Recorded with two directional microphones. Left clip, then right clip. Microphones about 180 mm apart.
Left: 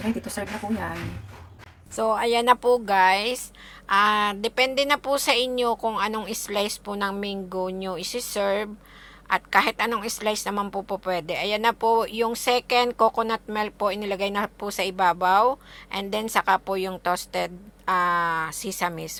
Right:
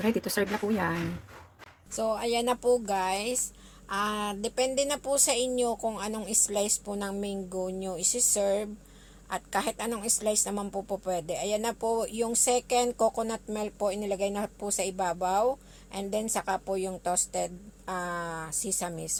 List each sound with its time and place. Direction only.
0.3 s speech: 50° right (ahead or behind)
2.0 s a woman's voice: 15° left (ahead or behind)